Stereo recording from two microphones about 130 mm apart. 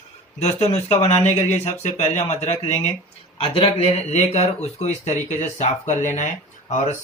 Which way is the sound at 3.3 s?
45° left (ahead or behind).